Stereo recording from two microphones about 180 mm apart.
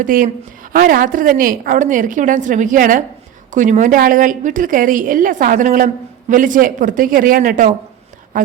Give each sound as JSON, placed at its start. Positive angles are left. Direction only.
{"t": 0.0, "sound": "a woman's voice", "side_deg": -50}